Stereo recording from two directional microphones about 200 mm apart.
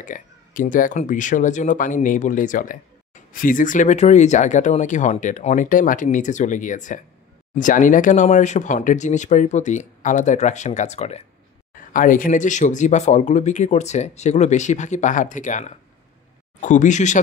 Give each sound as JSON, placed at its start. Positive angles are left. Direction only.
{"t": 0.0, "sound": "speech", "side_deg": 40}